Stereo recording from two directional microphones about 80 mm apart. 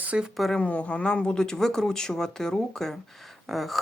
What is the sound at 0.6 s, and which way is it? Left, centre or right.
Speech, centre.